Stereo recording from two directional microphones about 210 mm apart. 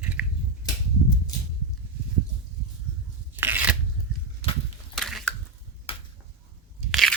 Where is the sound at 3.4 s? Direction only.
10° right (ahead or behind).